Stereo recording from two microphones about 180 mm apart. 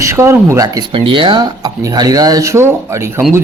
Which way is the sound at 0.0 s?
15° right (ahead or behind).